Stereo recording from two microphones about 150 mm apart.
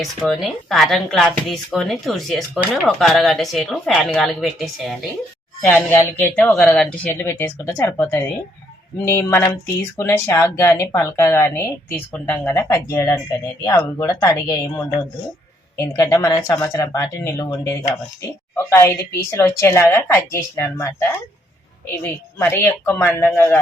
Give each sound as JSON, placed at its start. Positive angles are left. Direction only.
{"t": 0.2, "sound": "speech", "side_deg": 0}
{"t": 5.6, "sound": "a woman's voice", "side_deg": 15}